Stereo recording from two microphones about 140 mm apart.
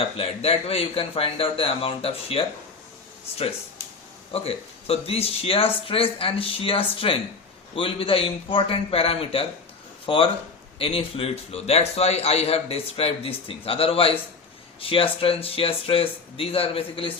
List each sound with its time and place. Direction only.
0.2 s a man's voice: 45° left (ahead or behind)
4.3 s a man's voice: 45° left (ahead or behind)